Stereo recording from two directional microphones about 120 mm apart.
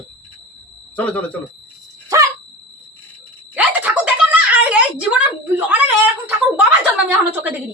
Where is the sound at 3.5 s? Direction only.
10° right (ahead or behind).